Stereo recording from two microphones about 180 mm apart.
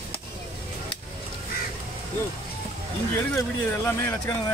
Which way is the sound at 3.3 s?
15° left (ahead or behind).